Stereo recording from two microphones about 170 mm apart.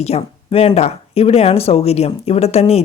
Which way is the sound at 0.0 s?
35° left (ahead or behind).